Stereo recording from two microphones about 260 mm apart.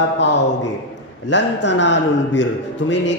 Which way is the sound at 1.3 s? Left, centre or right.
Left.